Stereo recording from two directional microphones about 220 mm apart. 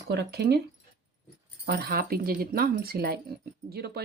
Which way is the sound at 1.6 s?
45° right (ahead or behind).